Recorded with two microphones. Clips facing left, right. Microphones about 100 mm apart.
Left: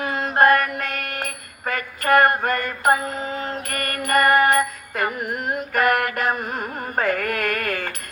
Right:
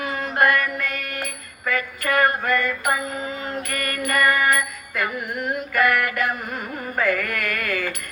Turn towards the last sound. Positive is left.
turn(degrees=45)  # may be behind; listen again after turning